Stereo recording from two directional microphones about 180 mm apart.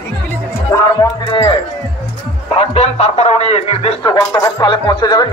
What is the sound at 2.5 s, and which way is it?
Speech, 35° left (ahead or behind).